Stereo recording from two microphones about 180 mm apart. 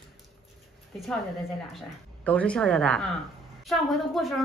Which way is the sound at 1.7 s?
5° left (ahead or behind).